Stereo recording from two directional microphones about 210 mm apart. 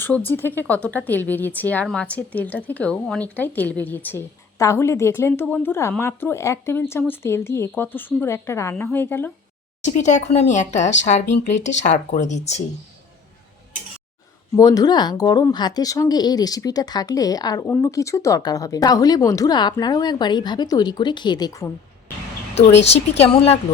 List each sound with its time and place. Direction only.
0.3 s speech: 10° left (ahead or behind)
9.8 s speech: 35° left (ahead or behind)
14.5 s speech: 15° left (ahead or behind)
22.5 s speech: 30° left (ahead or behind)